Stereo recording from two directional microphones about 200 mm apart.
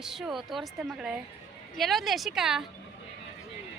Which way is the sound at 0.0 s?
Centre (ahead or behind).